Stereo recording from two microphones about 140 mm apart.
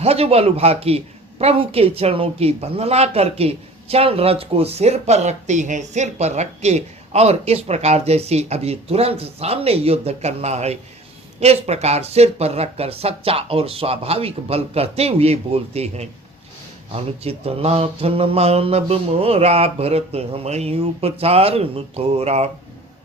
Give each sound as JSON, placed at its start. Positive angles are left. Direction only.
{"t": 0.0, "sound": "a woman's voice", "side_deg": -45}